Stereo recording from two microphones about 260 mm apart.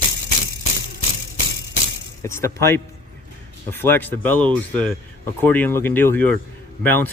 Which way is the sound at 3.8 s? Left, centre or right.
Centre.